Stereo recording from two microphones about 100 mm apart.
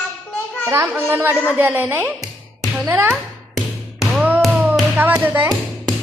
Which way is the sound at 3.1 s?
Centre (ahead or behind).